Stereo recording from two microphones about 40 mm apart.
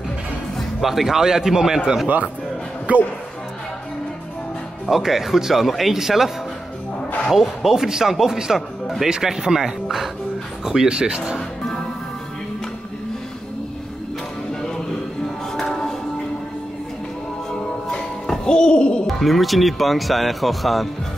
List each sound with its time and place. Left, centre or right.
0.6 s speech: centre
2.9 s speech: right
4.8 s speech: centre
7.3 s speech: centre
15.2 s music: centre
17.9 s music: left
19.0 s speech: centre